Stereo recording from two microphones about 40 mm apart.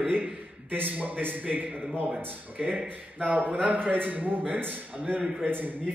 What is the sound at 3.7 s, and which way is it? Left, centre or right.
A man's voice, right.